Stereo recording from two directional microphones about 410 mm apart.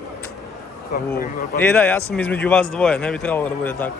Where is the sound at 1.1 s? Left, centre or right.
Left.